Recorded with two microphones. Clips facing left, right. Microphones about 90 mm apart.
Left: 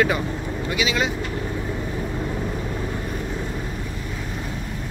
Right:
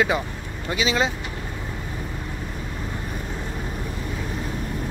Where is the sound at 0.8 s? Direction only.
30° right (ahead or behind).